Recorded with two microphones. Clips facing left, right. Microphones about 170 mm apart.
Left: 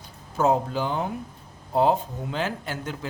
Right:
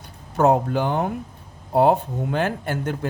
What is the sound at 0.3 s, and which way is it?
Speech, 60° right (ahead or behind).